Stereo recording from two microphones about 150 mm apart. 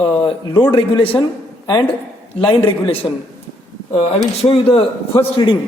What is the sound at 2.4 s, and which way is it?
Speech, 35° left (ahead or behind).